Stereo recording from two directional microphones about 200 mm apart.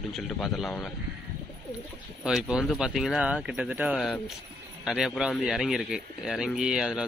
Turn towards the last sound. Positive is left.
turn(degrees=0)  # may be behind; listen again after turning